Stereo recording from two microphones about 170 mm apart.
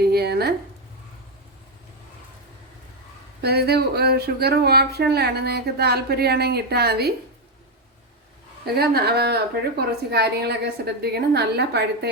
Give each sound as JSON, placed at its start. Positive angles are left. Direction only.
{"t": 0.0, "sound": "a sound", "side_deg": -70}
{"t": 3.4, "sound": "speech", "side_deg": -70}
{"t": 8.6, "sound": "speech", "side_deg": -65}